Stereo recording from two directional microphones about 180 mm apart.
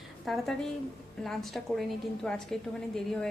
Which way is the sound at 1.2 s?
Centre (ahead or behind).